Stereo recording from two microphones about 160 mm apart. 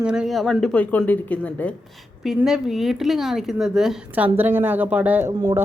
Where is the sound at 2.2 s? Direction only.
Centre (ahead or behind); by 5.6 s 20° right (ahead or behind).